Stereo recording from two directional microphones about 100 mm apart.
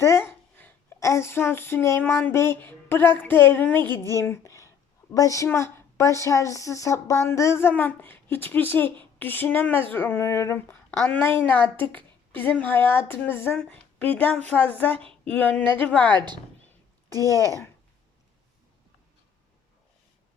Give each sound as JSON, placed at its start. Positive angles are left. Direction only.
{"t": 0.0, "sound": "a sound", "side_deg": 25}
{"t": 0.9, "sound": "a woman's voice", "side_deg": 30}
{"t": 16.1, "sound": "speech", "side_deg": -50}
{"t": 17.3, "sound": "speech", "side_deg": -35}